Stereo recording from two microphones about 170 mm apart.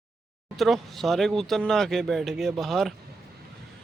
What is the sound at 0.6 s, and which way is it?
Speech, centre (ahead or behind).